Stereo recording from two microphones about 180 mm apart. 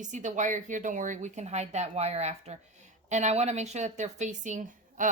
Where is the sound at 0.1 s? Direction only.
45° right (ahead or behind).